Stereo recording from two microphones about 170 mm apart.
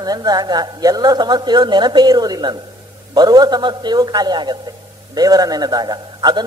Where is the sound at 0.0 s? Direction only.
20° right (ahead or behind).